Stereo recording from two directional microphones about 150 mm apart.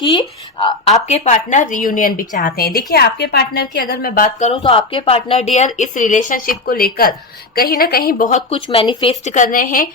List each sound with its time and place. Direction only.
0.0 s speech: 25° left (ahead or behind)
0.9 s a woman's voice: 45° left (ahead or behind); by 4.4 s 70° left (ahead or behind)
4.4 s a woman's voice: 40° left (ahead or behind); by 8.3 s 85° left
8.5 s speech: 35° left (ahead or behind)
9.2 s a woman's voice: 55° left (ahead or behind)